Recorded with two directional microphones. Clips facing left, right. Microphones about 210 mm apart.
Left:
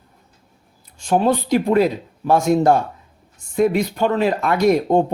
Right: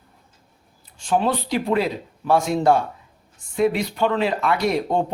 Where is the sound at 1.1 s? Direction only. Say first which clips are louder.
Left 4 dB; 45° left (ahead or behind).